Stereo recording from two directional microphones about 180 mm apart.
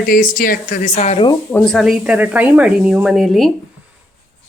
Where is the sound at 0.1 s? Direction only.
50° left (ahead or behind).